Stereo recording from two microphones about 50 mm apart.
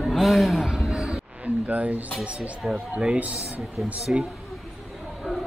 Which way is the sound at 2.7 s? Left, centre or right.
Centre.